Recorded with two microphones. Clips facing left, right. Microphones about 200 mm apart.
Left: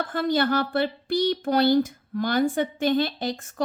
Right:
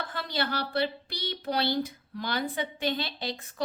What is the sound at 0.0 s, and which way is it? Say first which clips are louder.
A woman's voice: left 9 dB; 50° left (ahead or behind).